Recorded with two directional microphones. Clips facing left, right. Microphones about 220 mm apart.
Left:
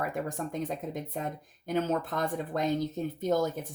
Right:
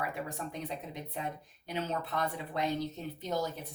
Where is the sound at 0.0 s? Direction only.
45° left (ahead or behind).